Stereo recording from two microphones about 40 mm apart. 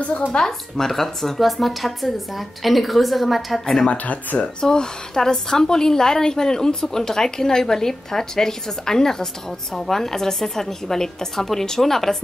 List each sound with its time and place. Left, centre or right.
0.3 s speech: centre
3.9 s speech: left
4.6 s a woman's voice: centre